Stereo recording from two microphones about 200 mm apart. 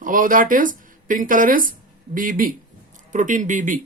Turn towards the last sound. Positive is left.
turn(degrees=-40)  # may be behind; listen again after turning